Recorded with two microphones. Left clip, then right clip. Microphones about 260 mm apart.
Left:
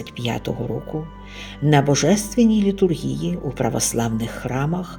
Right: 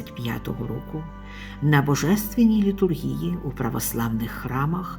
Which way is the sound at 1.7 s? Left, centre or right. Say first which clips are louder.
Left 5 dB; centre.